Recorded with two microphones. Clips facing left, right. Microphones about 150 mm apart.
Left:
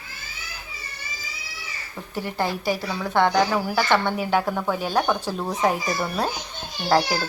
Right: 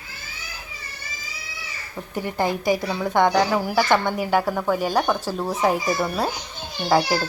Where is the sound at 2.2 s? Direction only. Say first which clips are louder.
Right 2 dB; 15° right (ahead or behind).